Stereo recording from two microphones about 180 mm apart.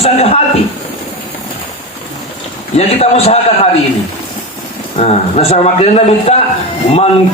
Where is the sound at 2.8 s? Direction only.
35° left (ahead or behind).